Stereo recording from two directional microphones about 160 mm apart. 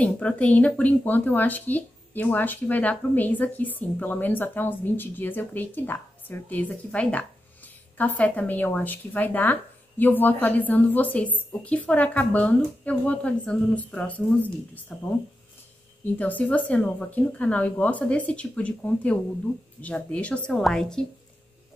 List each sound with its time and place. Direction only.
0.0 s speech: 10° left (ahead or behind)
16.2 s speech: 10° left (ahead or behind)